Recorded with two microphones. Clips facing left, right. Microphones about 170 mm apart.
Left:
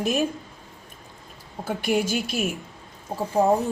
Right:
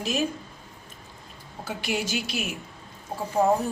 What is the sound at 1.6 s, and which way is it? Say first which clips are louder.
Speech: left 6 dB; 50° left (ahead or behind).